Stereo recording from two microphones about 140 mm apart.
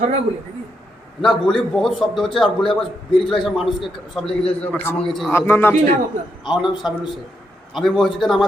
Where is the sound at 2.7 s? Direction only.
35° left (ahead or behind).